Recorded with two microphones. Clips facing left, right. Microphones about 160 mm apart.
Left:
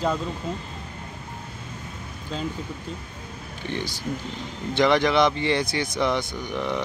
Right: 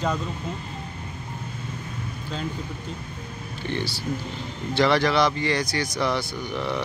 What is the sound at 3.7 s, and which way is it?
Speech, 15° left (ahead or behind).